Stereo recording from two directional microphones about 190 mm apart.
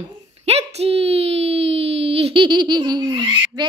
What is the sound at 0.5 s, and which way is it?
A woman's voice, 35° right (ahead or behind).